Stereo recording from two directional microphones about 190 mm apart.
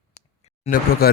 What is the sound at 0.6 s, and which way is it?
Speech, 50° left (ahead or behind).